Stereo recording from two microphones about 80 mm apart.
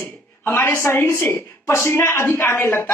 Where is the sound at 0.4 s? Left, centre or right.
Left.